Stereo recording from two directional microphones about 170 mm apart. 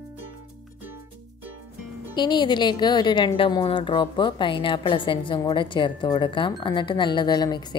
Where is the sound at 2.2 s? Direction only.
25° left (ahead or behind).